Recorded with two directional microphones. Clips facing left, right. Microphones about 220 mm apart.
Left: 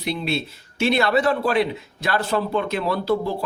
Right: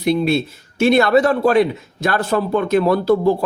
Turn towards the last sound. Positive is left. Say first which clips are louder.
# right 7 dB
turn(degrees=-45)  # may be behind; listen again after turning